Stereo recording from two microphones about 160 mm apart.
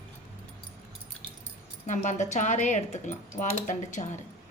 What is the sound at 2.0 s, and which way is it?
Speech, 45° left (ahead or behind).